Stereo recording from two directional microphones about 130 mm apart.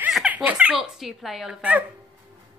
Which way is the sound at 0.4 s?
10° right (ahead or behind).